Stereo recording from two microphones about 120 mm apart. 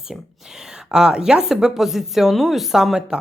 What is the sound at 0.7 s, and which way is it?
Speech, 5° right (ahead or behind).